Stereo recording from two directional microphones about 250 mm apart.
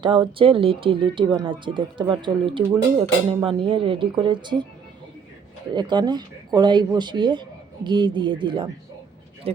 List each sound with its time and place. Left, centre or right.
0.0 s speech: centre
5.7 s speech: centre